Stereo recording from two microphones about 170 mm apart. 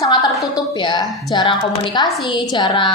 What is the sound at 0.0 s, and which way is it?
A woman's voice, 20° left (ahead or behind).